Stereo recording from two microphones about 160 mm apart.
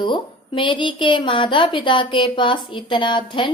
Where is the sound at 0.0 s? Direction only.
30° left (ahead or behind).